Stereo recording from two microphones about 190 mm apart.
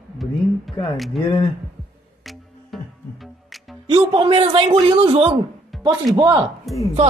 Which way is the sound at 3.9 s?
25° right (ahead or behind).